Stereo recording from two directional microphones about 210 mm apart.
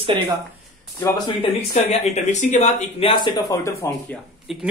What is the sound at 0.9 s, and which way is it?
Speech, 15° left (ahead or behind).